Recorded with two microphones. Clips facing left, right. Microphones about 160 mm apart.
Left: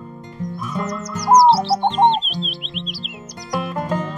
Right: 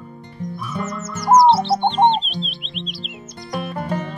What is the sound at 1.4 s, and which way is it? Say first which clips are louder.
Music: even; centre (ahead or behind).